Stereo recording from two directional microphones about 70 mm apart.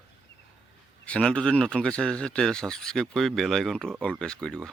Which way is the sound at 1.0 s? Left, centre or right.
Centre.